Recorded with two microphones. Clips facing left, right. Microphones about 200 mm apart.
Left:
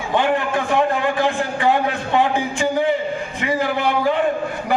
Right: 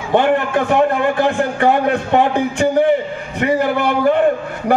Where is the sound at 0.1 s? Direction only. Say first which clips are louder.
Right 5 dB; 60° right (ahead or behind).